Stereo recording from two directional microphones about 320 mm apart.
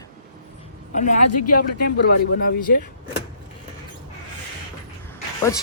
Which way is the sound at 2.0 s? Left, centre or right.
Left.